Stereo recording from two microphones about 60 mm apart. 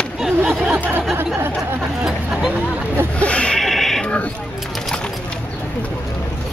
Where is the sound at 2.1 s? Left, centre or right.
Centre.